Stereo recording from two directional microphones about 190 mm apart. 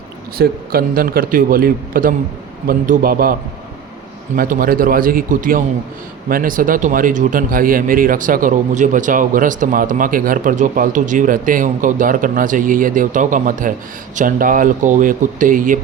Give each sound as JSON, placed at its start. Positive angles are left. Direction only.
{"t": 0.3, "sound": "speech", "side_deg": -50}
{"t": 4.4, "sound": "speech", "side_deg": -50}